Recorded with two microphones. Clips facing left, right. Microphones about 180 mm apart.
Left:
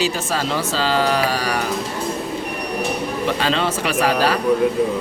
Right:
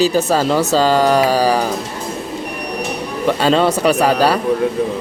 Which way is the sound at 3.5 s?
40° right (ahead or behind).